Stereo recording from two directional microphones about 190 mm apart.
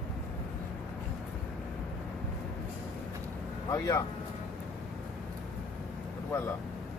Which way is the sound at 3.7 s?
15° left (ahead or behind).